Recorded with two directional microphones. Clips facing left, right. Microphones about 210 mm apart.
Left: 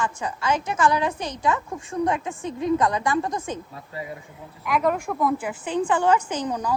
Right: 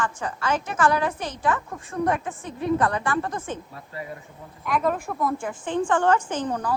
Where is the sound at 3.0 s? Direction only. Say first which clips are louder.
Left 2 dB; 15° left (ahead or behind).